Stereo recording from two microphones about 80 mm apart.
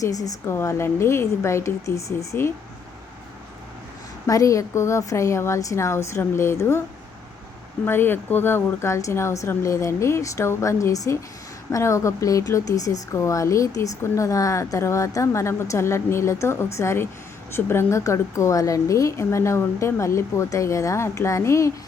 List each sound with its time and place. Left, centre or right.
0.0 s a woman's voice: left
0.4 s speech: left
4.3 s speech: left
7.9 s speech: left